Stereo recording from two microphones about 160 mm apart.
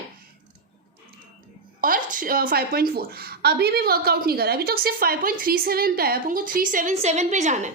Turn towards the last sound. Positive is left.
turn(degrees=-50)  # may be behind; listen again after turning